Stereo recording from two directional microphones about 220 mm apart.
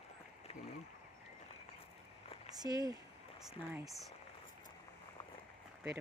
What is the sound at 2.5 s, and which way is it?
Speech, 15° right (ahead or behind).